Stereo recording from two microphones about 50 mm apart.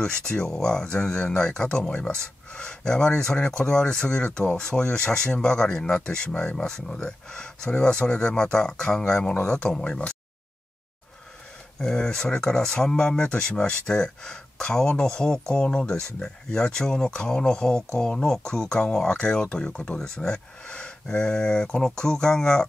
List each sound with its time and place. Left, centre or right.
0.0 s speech: centre
11.8 s speech: centre